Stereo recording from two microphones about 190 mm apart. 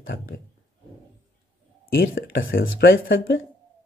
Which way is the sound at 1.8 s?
50° left (ahead or behind).